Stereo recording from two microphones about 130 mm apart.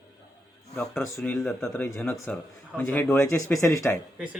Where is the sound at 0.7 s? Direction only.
Centre (ahead or behind); by 4.0 s 20° left (ahead or behind).